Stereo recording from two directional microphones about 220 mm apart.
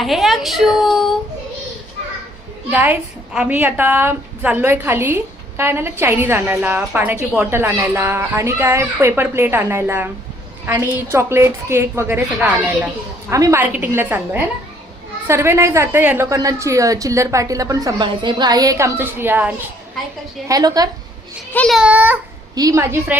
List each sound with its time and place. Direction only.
0.0 s a woman's voice: centre (ahead or behind)
2.6 s a woman's voice: 10° right (ahead or behind)
21.5 s a child's voice: 5° left (ahead or behind)